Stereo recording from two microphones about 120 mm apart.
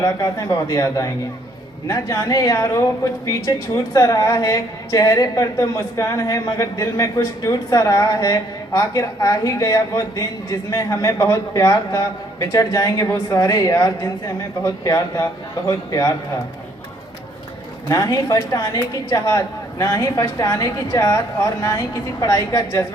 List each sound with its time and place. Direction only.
0.0 s speech: 30° left (ahead or behind)
17.8 s speech: 30° left (ahead or behind)